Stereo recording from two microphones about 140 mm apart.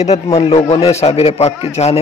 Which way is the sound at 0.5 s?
45° left (ahead or behind).